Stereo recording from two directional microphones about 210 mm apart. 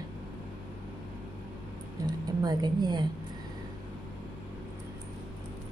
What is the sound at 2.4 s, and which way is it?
Speech, 20° right (ahead or behind).